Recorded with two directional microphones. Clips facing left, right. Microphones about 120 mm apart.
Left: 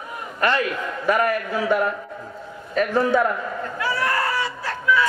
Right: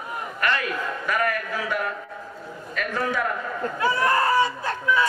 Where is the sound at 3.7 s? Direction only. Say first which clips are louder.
Right 2 dB; 25° right (ahead or behind).